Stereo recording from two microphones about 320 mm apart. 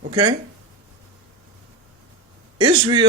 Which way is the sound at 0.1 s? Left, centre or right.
Centre.